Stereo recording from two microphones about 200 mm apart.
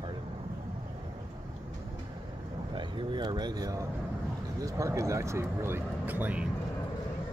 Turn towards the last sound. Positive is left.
turn(degrees=-10)  # may be behind; listen again after turning